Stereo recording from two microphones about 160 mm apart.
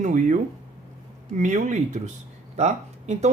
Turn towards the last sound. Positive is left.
turn(degrees=-45)  # may be behind; listen again after turning